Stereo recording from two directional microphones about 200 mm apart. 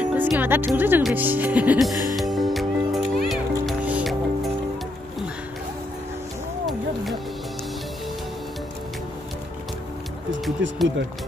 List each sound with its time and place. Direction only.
0.0 s music: 5° right (ahead or behind)
10.6 s speech: 70° right (ahead or behind)